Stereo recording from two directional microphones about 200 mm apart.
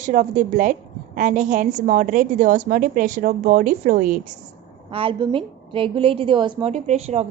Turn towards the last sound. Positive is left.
turn(degrees=-35)  # may be behind; listen again after turning